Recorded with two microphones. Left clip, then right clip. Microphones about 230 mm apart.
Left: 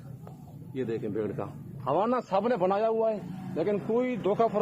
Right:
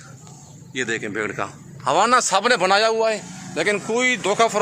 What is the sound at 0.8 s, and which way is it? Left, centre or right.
A man's voice, centre.